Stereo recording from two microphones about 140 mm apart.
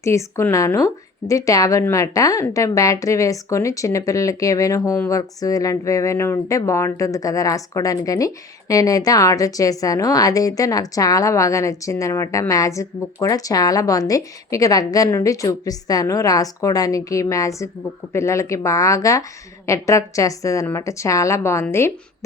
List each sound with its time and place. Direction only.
0.0 s a woman's voice: 20° left (ahead or behind)